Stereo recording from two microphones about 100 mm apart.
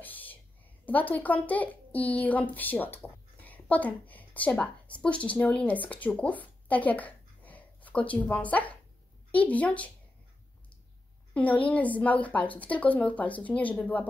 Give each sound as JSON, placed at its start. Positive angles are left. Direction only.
{"t": 0.0, "sound": "a sound", "side_deg": 15}
{"t": 0.8, "sound": "a woman's voice", "side_deg": 15}
{"t": 11.3, "sound": "a woman's voice", "side_deg": 15}